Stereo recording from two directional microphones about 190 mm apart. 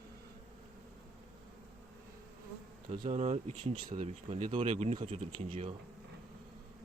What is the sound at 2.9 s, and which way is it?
Speech, 30° right (ahead or behind).